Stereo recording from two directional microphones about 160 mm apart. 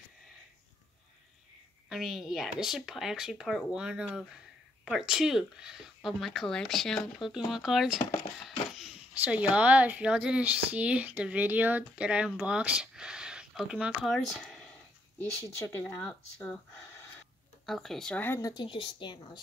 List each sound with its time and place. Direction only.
1.9 s speech: centre (ahead or behind)
15.1 s speech: 15° left (ahead or behind)
17.6 s speech: centre (ahead or behind); by 19.1 s 30° left (ahead or behind)